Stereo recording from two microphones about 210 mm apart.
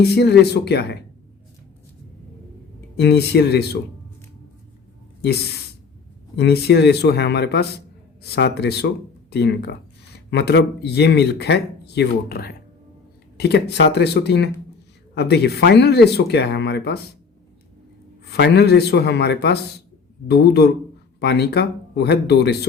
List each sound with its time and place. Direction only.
0.0 s speech: 50° left (ahead or behind)
3.0 s speech: 50° left (ahead or behind)
6.3 s speech: 50° left (ahead or behind)
18.3 s speech: 55° left (ahead or behind)